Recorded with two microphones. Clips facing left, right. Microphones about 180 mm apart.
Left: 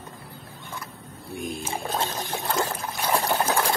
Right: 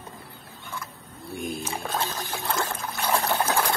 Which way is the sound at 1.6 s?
30° left (ahead or behind).